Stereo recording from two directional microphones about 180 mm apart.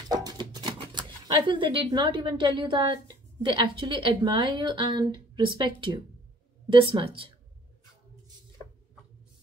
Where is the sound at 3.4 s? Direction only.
25° right (ahead or behind).